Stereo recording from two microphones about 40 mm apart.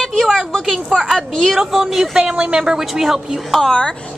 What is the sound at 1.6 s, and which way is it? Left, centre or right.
A woman's voice, centre.